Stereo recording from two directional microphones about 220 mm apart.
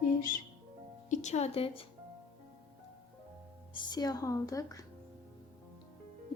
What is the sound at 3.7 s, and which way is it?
Speech, 20° left (ahead or behind).